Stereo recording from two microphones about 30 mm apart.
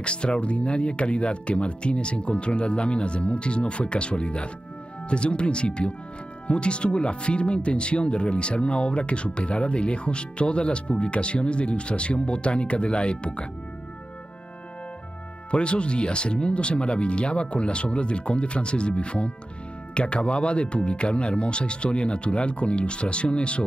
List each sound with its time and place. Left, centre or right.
0.0 s speech: left
15.5 s speech: left